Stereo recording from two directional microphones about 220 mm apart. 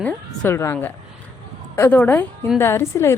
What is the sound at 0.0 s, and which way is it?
A woman's voice, 10° left (ahead or behind).